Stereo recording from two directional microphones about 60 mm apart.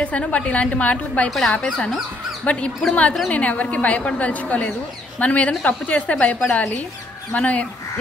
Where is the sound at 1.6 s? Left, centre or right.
Centre.